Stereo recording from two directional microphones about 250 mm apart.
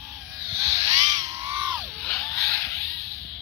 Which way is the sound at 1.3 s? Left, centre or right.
Centre.